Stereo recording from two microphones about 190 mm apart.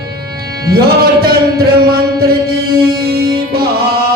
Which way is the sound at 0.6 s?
55° right (ahead or behind).